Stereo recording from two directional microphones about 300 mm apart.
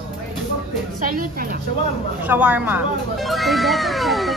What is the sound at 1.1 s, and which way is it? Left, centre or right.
Speech, right.